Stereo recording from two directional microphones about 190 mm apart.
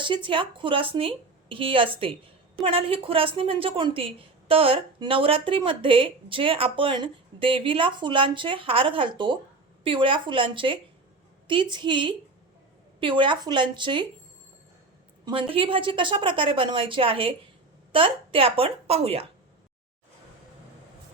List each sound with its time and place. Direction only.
0.0 s a woman's voice: 25° right (ahead or behind)
15.2 s a woman's voice: 25° right (ahead or behind)